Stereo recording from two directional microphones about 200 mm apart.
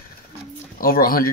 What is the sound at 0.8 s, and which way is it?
Speech, 45° left (ahead or behind).